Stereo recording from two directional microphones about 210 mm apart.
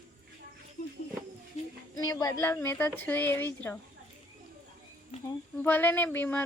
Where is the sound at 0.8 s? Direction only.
45° left (ahead or behind).